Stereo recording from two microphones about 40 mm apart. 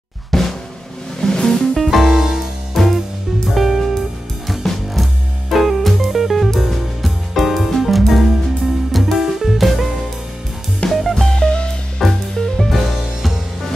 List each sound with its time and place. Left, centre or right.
0.3 s drum: centre
1.2 s music: centre
1.8 s music: centre
2.8 s music: centre
10.9 s music: centre
11.3 s music: left
12.0 s music: centre